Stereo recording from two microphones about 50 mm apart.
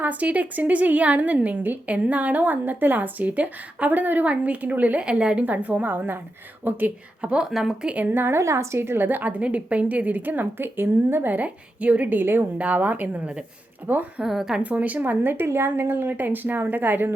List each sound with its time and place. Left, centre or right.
0.0 s a woman's voice: right
4.9 s a woman's voice: centre
5.5 s a woman's voice: right
7.2 s speech: right
8.1 s a woman's voice: right
8.4 s a woman's voice: right
9.4 s a woman's voice: right
11.3 s a woman's voice: right
12.5 s a woman's voice: right
14.2 s speech: centre
14.6 s a woman's voice: right